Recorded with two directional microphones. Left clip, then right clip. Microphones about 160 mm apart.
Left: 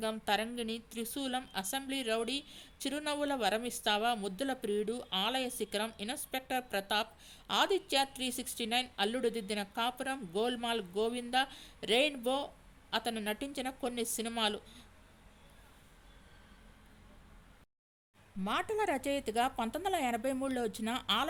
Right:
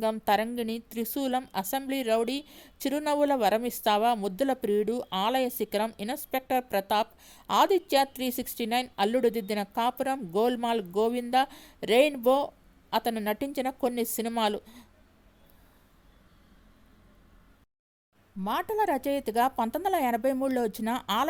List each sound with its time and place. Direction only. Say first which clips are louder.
0.0 s a woman's voice: right 8 dB; 45° right (ahead or behind)
18.4 s speech: right 6 dB; 30° right (ahead or behind)